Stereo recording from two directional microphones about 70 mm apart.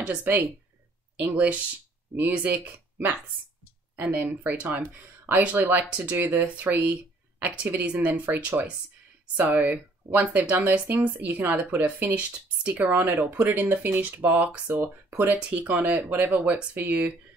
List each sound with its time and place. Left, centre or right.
0.0 s speech: centre